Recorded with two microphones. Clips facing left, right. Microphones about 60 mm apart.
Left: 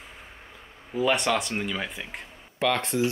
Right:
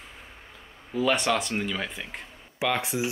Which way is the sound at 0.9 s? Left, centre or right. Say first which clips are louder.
Even; centre.